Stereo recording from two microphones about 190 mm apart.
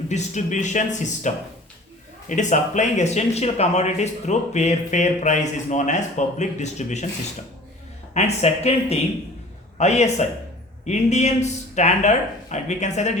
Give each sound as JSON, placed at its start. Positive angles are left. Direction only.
{"t": 0.1, "sound": "speech", "side_deg": 40}
{"t": 2.3, "sound": "speech", "side_deg": 40}
{"t": 8.1, "sound": "speech", "side_deg": 35}